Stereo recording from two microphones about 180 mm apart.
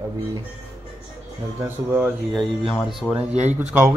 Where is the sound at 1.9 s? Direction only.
5° right (ahead or behind).